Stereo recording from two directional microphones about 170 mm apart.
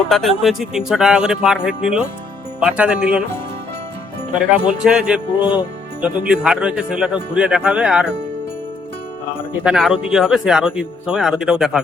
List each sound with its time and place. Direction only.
0.1 s speech: centre (ahead or behind)
4.8 s speech: 5° right (ahead or behind)
5.4 s speech: 30° left (ahead or behind)
6.0 s speech: 5° right (ahead or behind)
9.6 s speech: 5° right (ahead or behind)